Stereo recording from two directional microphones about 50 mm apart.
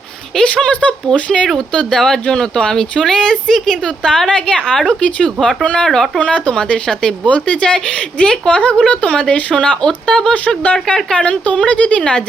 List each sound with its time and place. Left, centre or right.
0.3 s a woman's voice: centre